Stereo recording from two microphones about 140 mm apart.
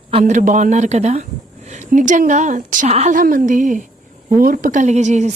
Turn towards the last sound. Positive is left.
turn(degrees=-55)  # may be behind; listen again after turning